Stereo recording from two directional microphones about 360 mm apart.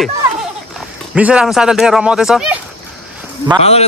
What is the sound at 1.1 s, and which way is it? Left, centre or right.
Speech, centre.